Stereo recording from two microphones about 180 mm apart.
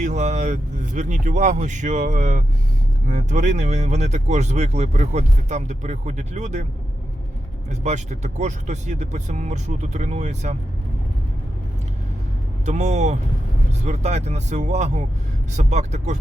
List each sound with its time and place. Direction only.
0.0 s speech: 40° right (ahead or behind)
7.7 s speech: 40° right (ahead or behind)
12.6 s speech: 40° right (ahead or behind)